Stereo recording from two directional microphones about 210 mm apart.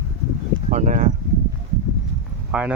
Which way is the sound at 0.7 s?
35° right (ahead or behind).